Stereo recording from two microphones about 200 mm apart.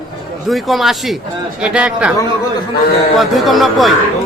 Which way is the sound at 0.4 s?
Centre (ahead or behind).